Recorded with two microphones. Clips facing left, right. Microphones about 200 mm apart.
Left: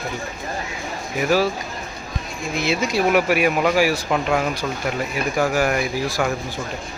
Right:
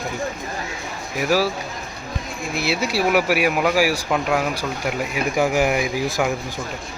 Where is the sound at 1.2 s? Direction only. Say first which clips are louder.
Left 1 dB; 5° right (ahead or behind).